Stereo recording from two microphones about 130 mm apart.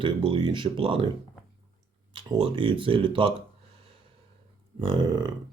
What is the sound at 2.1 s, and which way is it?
Speech, 40° right (ahead or behind).